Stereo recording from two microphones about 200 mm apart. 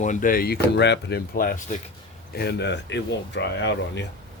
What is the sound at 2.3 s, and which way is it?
Speech, 55° left (ahead or behind).